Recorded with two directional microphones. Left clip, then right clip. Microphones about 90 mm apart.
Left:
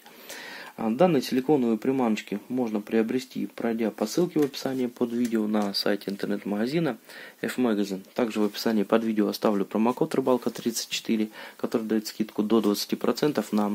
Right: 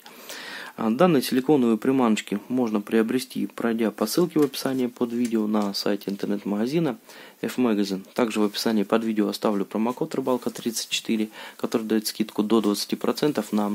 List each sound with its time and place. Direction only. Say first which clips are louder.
0.7 s speech: right 2 dB; 30° right (ahead or behind)
8.5 s speech: left 2 dB; 10° right (ahead or behind)
9.8 s speech: left 2 dB; 20° left (ahead or behind)
10.2 s speech: left 1 dB; 5° left (ahead or behind)
11.7 s speech: right 3 dB; 15° right (ahead or behind)